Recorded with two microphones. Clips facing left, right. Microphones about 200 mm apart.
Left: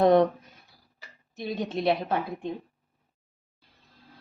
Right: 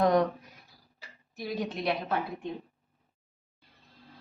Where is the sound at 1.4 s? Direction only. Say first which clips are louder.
Left 3 dB; 25° left (ahead or behind).